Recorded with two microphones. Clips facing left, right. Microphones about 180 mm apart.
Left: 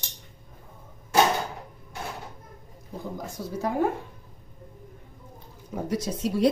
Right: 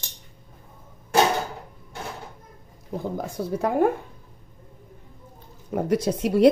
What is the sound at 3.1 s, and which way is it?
Speech, 60° right (ahead or behind).